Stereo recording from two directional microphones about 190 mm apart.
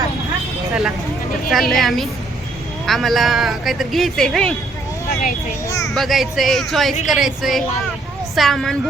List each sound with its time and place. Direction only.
0.7 s speech: 5° right (ahead or behind)
5.6 s a child's voice: 15° left (ahead or behind)
5.9 s speech: centre (ahead or behind)